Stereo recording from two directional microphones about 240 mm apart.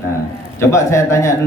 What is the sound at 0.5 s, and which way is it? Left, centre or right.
Speech, centre.